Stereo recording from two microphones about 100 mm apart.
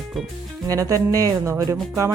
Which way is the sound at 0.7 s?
35° right (ahead or behind).